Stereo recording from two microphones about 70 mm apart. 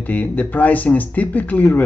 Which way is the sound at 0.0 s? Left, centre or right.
Left.